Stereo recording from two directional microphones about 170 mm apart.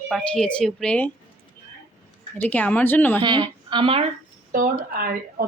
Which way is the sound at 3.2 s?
25° right (ahead or behind).